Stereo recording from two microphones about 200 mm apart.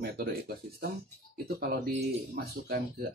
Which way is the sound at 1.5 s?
50° right (ahead or behind).